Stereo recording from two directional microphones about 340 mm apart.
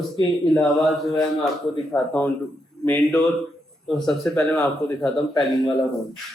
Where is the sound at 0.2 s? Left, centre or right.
Centre.